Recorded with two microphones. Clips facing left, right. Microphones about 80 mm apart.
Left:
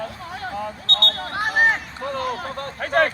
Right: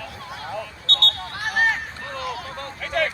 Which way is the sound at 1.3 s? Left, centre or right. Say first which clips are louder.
Left 4 dB; left.